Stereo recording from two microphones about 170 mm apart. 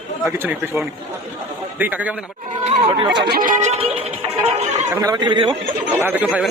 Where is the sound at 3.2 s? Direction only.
65° right (ahead or behind); by 4.9 s 35° right (ahead or behind).